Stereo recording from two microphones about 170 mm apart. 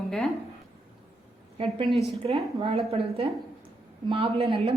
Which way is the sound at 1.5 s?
35° right (ahead or behind).